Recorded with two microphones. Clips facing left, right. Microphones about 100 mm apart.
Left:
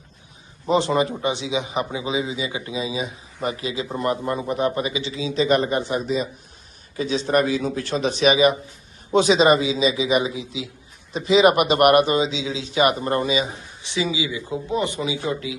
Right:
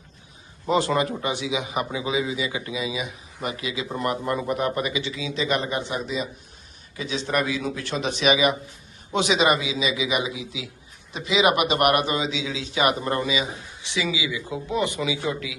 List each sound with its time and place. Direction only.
0.7 s a man's voice: 20° left (ahead or behind)